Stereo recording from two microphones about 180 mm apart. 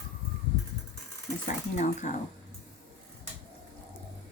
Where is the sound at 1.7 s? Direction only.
45° left (ahead or behind).